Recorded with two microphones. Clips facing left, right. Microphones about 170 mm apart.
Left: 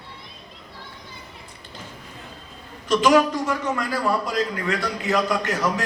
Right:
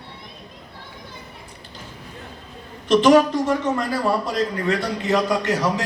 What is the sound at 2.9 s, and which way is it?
A man's voice, 30° right (ahead or behind).